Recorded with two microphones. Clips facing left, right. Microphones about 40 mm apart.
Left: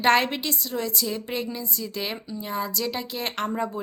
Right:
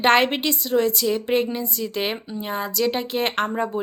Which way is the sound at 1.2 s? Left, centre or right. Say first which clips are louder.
Right 8 dB; right.